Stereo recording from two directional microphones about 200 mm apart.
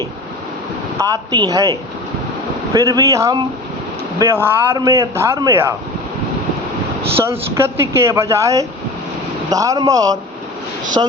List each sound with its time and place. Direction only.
0.9 s speech: 20° right (ahead or behind)
2.7 s speech: 15° right (ahead or behind)
7.3 s speech: 10° right (ahead or behind)